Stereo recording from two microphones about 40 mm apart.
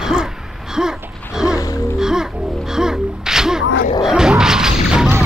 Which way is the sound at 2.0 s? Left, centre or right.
Centre.